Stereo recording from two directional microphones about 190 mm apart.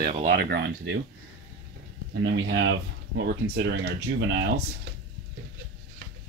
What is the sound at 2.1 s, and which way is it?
Speech, 75° right (ahead or behind).